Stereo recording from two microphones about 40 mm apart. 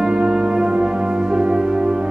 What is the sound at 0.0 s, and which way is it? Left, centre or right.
Music, right.